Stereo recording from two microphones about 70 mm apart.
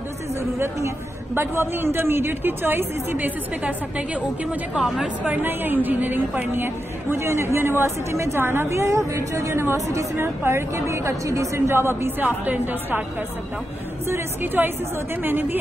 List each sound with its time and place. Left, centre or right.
0.4 s a woman's voice: right
3.6 s a woman's voice: centre
4.7 s speech: centre
5.2 s a woman's voice: right
14.0 s a woman's voice: right